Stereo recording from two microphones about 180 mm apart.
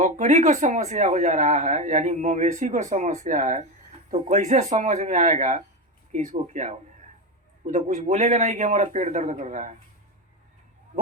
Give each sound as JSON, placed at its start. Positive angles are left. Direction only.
{"t": 0.0, "sound": "a man's voice", "side_deg": -40}